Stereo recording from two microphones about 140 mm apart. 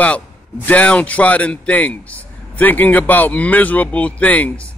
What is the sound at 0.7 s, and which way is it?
A man's voice, 10° left (ahead or behind).